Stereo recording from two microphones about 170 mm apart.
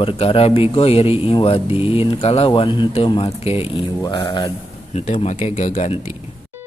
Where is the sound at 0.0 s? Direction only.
30° left (ahead or behind).